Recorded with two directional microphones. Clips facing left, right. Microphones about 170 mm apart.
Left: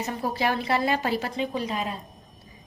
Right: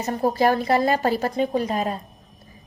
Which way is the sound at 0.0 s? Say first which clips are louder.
Right 7 dB; 45° right (ahead or behind).